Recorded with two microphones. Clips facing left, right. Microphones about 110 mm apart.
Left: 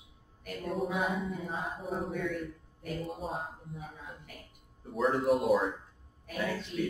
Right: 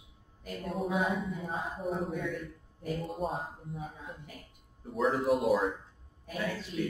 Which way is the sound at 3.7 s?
25° right (ahead or behind).